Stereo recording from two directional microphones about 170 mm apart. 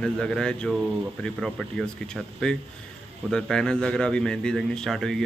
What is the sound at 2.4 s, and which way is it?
A man's voice, 5° left (ahead or behind).